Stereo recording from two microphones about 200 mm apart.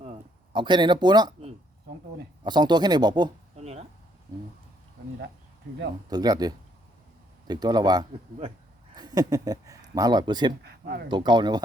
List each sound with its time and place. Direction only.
0.5 s speech: 25° right (ahead or behind)
3.6 s a sound: 30° right (ahead or behind)
6.1 s speech: 20° right (ahead or behind)
9.0 s a sound: 20° right (ahead or behind)
9.9 s speech: 20° right (ahead or behind)
10.6 s speech: 50° right (ahead or behind)
11.1 s speech: 20° right (ahead or behind)